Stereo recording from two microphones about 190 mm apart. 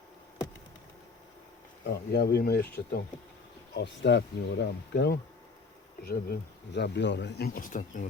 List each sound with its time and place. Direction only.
1.9 s speech: 55° left (ahead or behind)